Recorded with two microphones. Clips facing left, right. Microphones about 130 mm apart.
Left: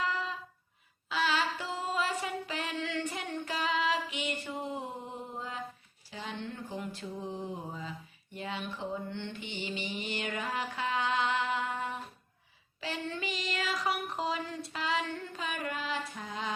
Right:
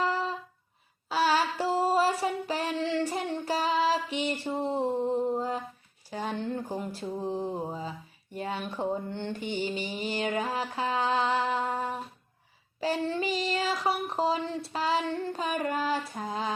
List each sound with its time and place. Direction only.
0.0 s a sound: 35° right (ahead or behind)
7.7 s speech: 35° right (ahead or behind)
12.8 s child singing: 35° right (ahead or behind)